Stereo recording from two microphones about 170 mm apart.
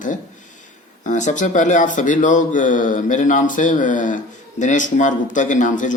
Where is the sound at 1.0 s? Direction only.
45° left (ahead or behind).